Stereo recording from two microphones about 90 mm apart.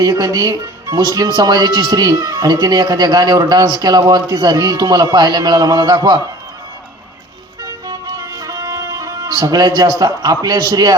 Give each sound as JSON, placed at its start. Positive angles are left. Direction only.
{"t": 0.0, "sound": "speech", "side_deg": -45}
{"t": 7.6, "sound": "music", "side_deg": -40}